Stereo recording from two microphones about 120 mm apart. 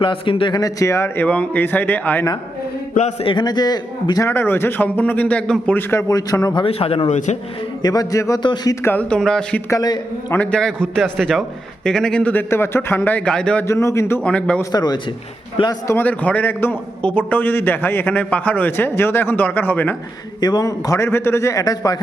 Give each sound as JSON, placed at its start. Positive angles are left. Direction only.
{"t": 0.0, "sound": "a man's voice", "side_deg": 45}
{"t": 3.2, "sound": "a man's voice", "side_deg": 40}
{"t": 4.3, "sound": "a man's voice", "side_deg": 20}
{"t": 6.5, "sound": "a man's voice", "side_deg": 50}
{"t": 7.8, "sound": "a man's voice", "side_deg": 30}
{"t": 8.4, "sound": "a man's voice", "side_deg": 40}
{"t": 8.7, "sound": "a man's voice", "side_deg": 20}
{"t": 9.6, "sound": "a man's voice", "side_deg": 30}
{"t": 10.3, "sound": "a man's voice", "side_deg": 10}
{"t": 13.7, "sound": "a man's voice", "side_deg": 25}
{"t": 14.3, "sound": "a man's voice", "side_deg": 10}
{"t": 14.6, "sound": "a man's voice", "side_deg": 35}
{"t": 15.9, "sound": "a man's voice", "side_deg": 15}
{"t": 20.4, "sound": "a man's voice", "side_deg": 35}